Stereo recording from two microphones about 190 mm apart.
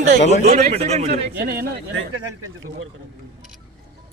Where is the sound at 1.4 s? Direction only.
55° right (ahead or behind).